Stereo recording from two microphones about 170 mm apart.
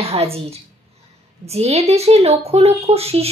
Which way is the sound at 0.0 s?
35° right (ahead or behind).